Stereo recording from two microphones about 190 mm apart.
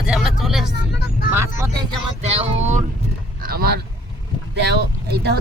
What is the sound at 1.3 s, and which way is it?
Speech, 15° right (ahead or behind).